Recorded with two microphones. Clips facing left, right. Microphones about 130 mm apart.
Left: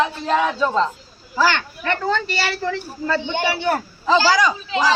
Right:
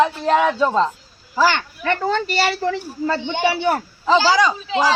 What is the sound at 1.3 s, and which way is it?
A child's voice, 15° right (ahead or behind).